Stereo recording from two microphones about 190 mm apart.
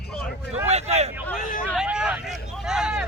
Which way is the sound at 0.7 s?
35° right (ahead or behind).